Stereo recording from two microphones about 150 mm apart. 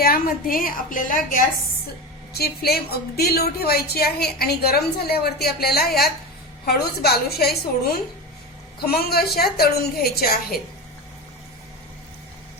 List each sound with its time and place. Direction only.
0.0 s a woman's voice: 75° left (ahead or behind)
2.4 s a woman's voice: 90° left
8.8 s a woman's voice: 90° left